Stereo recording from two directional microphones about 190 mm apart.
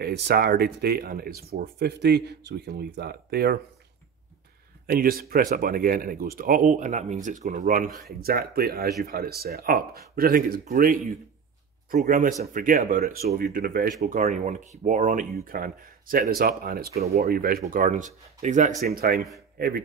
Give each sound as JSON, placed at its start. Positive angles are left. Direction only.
{"t": 0.0, "sound": "speech", "side_deg": -55}
{"t": 4.9, "sound": "speech", "side_deg": -50}
{"t": 18.9, "sound": "speech", "side_deg": -50}